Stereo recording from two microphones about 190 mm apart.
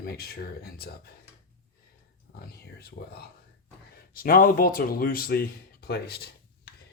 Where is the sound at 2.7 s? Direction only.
55° left (ahead or behind).